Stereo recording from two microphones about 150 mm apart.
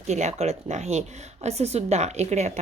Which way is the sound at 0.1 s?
50° right (ahead or behind).